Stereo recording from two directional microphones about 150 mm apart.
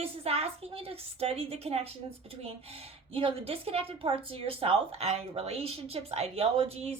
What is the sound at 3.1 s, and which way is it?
Speech, 40° right (ahead or behind).